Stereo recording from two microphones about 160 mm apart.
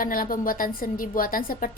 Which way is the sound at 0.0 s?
60° left (ahead or behind).